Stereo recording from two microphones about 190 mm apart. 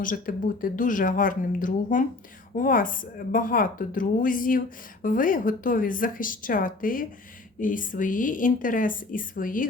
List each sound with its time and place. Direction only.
0.0 s a woman's voice: 45° left (ahead or behind)